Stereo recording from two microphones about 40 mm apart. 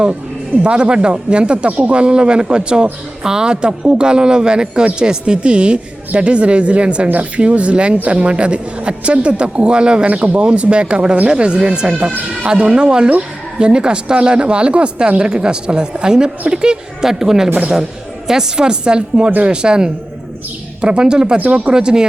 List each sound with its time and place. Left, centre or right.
0.6 s a woman's voice: right
19.3 s speech: right
19.6 s a woman's voice: right
21.3 s speech: right
21.7 s a woman's voice: centre